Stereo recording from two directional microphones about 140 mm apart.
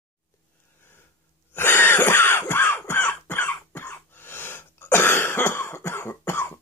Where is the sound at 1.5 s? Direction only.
15° left (ahead or behind).